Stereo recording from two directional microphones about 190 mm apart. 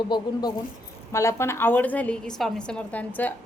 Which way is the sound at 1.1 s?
15° left (ahead or behind).